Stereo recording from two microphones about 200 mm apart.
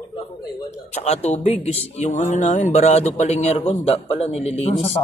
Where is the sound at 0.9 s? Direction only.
35° left (ahead or behind).